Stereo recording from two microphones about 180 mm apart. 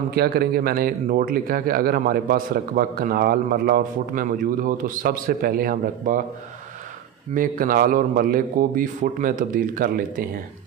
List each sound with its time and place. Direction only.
0.1 s speech: 60° right (ahead or behind)
7.3 s a man's voice: 50° right (ahead or behind)